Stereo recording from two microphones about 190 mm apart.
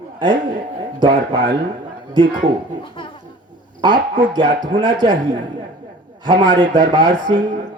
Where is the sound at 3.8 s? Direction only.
25° right (ahead or behind).